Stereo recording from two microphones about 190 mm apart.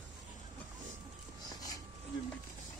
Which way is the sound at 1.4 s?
20° left (ahead or behind).